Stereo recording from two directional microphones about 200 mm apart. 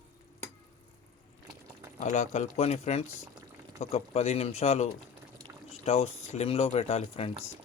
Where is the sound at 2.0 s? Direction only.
35° left (ahead or behind).